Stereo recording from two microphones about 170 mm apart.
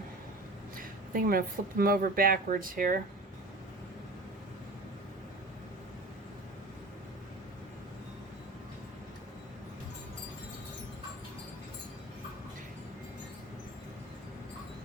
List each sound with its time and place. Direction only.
0.8 s speech: 60° right (ahead or behind)